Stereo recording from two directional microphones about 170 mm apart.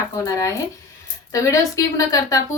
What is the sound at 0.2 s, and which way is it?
A woman's voice, 20° left (ahead or behind).